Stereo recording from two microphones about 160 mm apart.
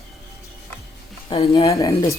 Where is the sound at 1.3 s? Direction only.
35° left (ahead or behind).